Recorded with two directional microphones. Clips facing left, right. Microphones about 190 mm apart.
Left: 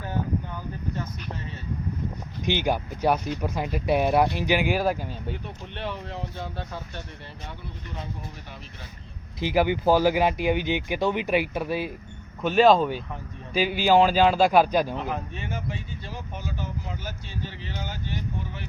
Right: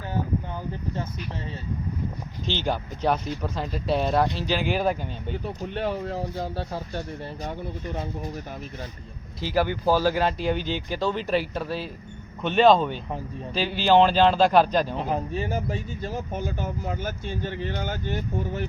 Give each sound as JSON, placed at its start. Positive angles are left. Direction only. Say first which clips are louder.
{"t": 2.5, "sound": "speech", "louder": "left 3 dB", "side_deg": 15}
{"t": 5.6, "sound": "speech", "louder": "right 7 dB", "side_deg": -40}
{"t": 9.4, "sound": "speech", "louder": "left 2 dB", "side_deg": 15}
{"t": 14.9, "sound": "speech", "louder": "right 4 dB", "side_deg": -35}